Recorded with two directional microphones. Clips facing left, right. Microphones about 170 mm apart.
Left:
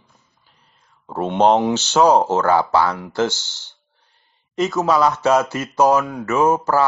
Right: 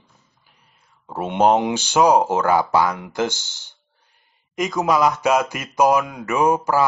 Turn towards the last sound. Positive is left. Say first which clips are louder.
# left 1 dB
turn(degrees=-15)  # may be behind; listen again after turning